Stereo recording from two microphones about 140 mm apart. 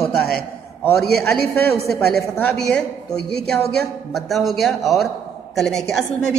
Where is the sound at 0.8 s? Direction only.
10° left (ahead or behind).